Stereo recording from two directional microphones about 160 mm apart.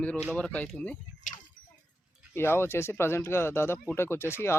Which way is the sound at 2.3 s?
15° left (ahead or behind).